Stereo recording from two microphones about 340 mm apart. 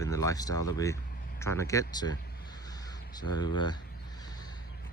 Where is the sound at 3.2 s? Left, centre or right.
Centre.